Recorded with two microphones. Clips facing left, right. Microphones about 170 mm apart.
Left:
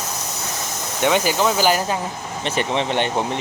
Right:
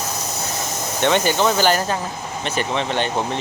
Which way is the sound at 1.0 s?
5° left (ahead or behind).